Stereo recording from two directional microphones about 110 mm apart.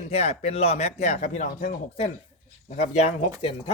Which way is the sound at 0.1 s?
70° left (ahead or behind).